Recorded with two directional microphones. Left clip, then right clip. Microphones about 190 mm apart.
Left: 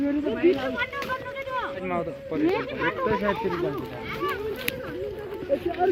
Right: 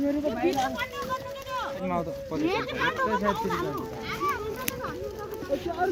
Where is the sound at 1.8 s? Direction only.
85° right.